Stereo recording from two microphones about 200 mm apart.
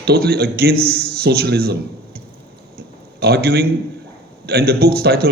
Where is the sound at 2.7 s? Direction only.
50° right (ahead or behind).